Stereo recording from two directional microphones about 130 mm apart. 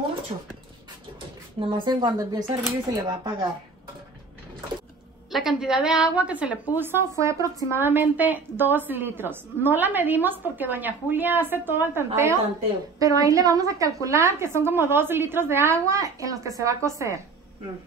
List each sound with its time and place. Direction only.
0.3 s speech: 40° right (ahead or behind)
1.6 s speech: 35° right (ahead or behind)
5.3 s a woman's voice: 5° right (ahead or behind); by 17.2 s 20° right (ahead or behind)